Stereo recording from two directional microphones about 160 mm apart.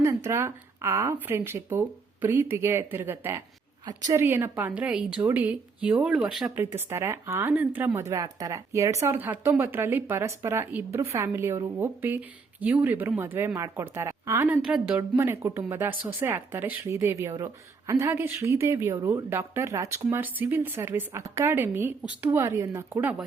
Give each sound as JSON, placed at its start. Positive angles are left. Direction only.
{"t": 0.0, "sound": "speech", "side_deg": -15}
{"t": 6.7, "sound": "speech", "side_deg": -15}